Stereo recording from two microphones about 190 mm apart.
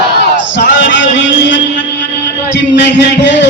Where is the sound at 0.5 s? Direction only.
70° left (ahead or behind).